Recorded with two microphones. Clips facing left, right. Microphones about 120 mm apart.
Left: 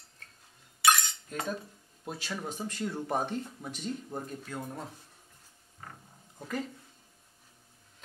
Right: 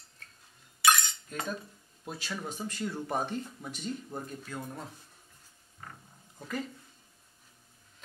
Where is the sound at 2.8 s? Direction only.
30° left (ahead or behind).